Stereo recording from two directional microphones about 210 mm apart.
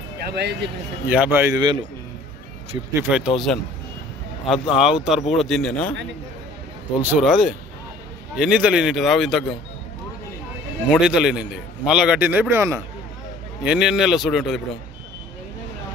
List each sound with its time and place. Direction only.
0.3 s speech: 55° right (ahead or behind)
1.0 s a man's voice: 10° right (ahead or behind)
2.9 s a man's voice: 10° right (ahead or behind)
7.0 s a man's voice: 5° right (ahead or behind)
10.9 s a man's voice: 5° right (ahead or behind)